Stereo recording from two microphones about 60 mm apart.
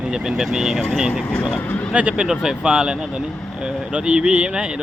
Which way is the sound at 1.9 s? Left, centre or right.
Centre.